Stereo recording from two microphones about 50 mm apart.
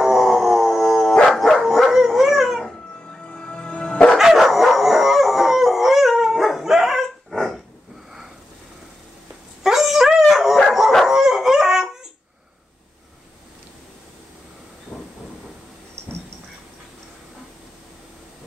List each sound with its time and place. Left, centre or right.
0.0 s music: centre
1.3 s dog: centre
3.3 s music: centre
4.2 s howl: centre
7.3 s dog: centre
9.6 s dog: centre
14.9 s train: left